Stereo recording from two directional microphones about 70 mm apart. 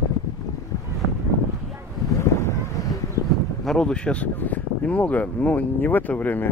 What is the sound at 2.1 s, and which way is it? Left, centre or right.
Wind noise, left.